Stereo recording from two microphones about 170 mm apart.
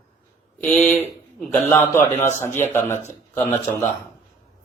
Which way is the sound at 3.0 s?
40° left (ahead or behind).